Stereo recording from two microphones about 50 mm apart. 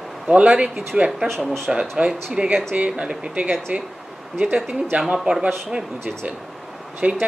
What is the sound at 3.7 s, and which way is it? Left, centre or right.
Speech, right.